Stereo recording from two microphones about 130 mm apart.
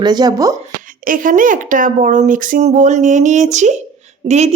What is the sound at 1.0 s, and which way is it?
A woman's voice, 90° right.